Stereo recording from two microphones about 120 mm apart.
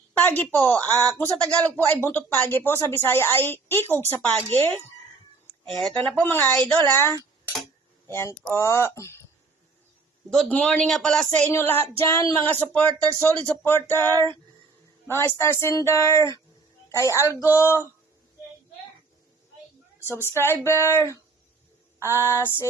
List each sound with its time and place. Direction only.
0.1 s a woman's voice: 15° left (ahead or behind)
5.6 s a woman's voice: 5° left (ahead or behind); by 9.2 s 25° left (ahead or behind)
10.2 s a woman's voice: 5° left (ahead or behind)
14.1 s music: 30° right (ahead or behind)
15.1 s speech: 20° left (ahead or behind)
20.4 s speech: 20° left (ahead or behind)